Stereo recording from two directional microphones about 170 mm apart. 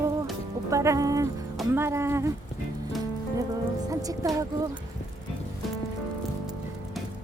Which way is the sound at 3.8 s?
20° right (ahead or behind).